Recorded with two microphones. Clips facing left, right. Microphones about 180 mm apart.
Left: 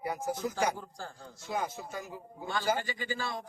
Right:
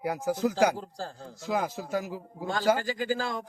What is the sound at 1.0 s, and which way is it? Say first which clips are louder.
Speech: right 6 dB; 35° right (ahead or behind).